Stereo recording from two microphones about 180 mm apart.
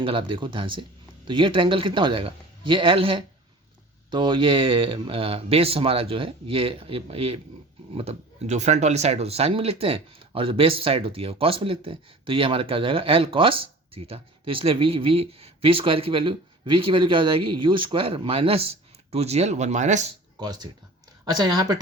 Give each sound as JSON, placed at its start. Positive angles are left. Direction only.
{"t": 0.0, "sound": "a man's voice", "side_deg": -30}
{"t": 20.4, "sound": "a man's voice", "side_deg": -25}